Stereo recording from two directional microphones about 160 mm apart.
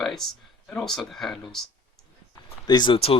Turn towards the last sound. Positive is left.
turn(degrees=35)  # may be behind; listen again after turning